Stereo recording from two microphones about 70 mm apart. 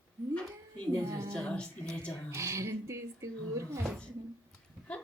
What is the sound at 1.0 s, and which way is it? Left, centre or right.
Speech, right.